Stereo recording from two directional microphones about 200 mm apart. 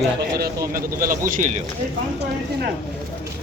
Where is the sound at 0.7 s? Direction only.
45° right (ahead or behind).